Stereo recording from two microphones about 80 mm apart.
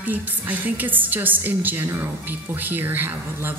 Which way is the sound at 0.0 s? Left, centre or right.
Right.